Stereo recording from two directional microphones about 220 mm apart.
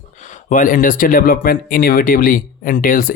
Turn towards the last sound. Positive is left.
turn(degrees=40)  # may be behind; listen again after turning